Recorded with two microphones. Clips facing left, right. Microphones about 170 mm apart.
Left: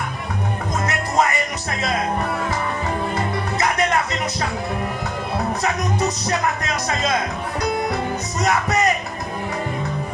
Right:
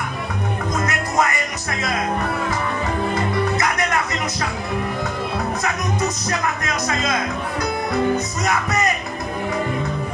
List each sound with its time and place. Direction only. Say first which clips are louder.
0.7 s music: left 1 dB; 30° left (ahead or behind)
3.5 s music: left 1 dB; 30° left (ahead or behind)
6.0 s music: left 2 dB; 35° left (ahead or behind)
8.5 s music: left 3 dB; 35° left (ahead or behind)